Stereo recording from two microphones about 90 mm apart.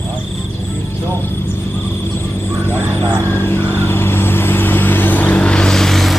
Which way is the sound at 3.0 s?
25° left (ahead or behind).